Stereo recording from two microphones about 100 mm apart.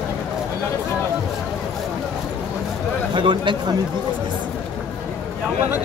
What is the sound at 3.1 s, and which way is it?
Speech, 55° right (ahead or behind).